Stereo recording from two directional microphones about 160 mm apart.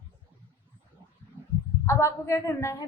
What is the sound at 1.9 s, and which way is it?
Speech, 15° left (ahead or behind).